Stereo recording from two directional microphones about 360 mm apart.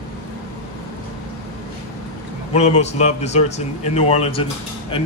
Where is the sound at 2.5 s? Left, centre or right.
Centre.